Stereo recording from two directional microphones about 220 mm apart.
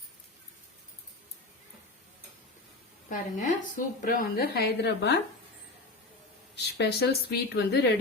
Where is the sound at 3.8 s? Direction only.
40° left (ahead or behind).